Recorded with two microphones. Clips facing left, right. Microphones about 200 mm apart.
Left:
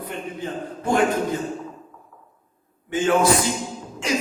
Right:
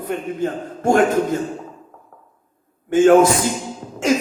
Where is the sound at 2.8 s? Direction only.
45° right (ahead or behind).